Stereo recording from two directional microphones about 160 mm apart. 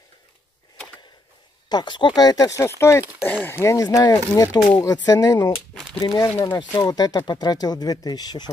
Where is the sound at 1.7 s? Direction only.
30° left (ahead or behind).